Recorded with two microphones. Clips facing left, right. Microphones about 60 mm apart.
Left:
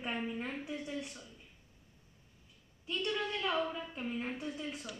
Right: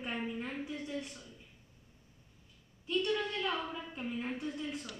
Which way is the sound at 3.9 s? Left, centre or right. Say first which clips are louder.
Even; centre.